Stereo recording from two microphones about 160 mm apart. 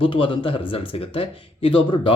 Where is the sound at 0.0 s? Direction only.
30° left (ahead or behind).